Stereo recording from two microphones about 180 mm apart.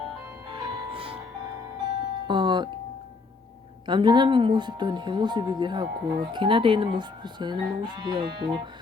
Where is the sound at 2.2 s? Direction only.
25° right (ahead or behind).